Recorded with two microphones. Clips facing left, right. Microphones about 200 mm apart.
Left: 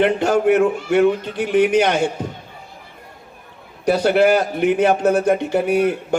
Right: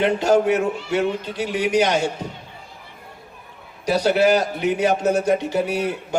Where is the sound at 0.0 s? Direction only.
55° left (ahead or behind).